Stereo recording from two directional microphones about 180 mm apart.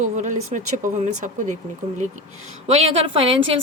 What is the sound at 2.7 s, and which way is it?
Speech, 35° right (ahead or behind).